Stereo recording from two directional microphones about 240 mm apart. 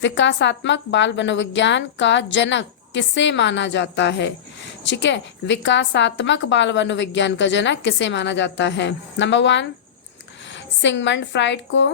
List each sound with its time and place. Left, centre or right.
0.0 s a woman's voice: left